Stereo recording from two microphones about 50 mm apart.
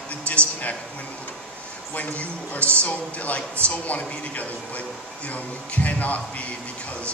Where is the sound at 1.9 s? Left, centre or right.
Left.